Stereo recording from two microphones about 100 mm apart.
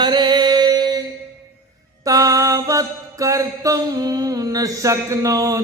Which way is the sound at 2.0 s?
35° right (ahead or behind).